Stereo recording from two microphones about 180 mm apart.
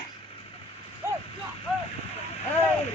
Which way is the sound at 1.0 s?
15° right (ahead or behind).